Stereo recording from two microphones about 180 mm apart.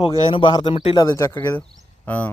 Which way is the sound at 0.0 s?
25° left (ahead or behind).